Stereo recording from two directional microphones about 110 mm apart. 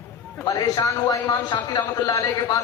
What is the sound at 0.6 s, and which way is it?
A man's voice, 35° left (ahead or behind).